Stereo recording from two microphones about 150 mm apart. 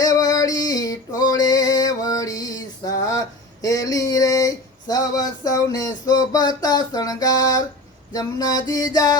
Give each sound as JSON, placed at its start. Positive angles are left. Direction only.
{"t": 0.0, "sound": "female singing", "side_deg": 25}
{"t": 1.3, "sound": "male singing", "side_deg": 25}
{"t": 8.1, "sound": "music", "side_deg": 25}